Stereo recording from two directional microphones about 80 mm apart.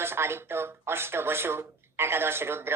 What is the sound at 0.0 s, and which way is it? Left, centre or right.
Speech, right.